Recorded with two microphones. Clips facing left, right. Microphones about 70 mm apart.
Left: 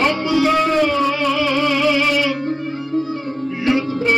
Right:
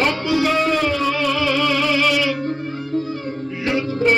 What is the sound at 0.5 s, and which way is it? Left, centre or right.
Music, left.